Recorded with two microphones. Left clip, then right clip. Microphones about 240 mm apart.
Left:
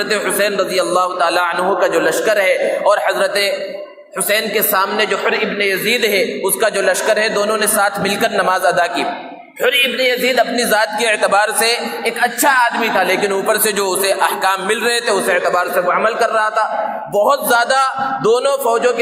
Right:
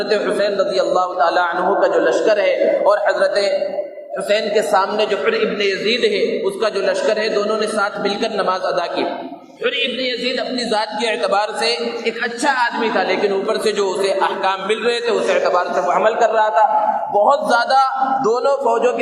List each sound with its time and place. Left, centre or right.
0.1 s a man's voice: left